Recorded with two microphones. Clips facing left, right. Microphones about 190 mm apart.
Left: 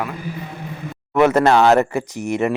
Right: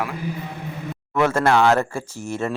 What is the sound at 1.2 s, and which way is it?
Speech, 20° left (ahead or behind).